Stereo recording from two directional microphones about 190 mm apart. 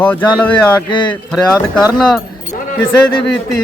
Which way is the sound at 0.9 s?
25° left (ahead or behind).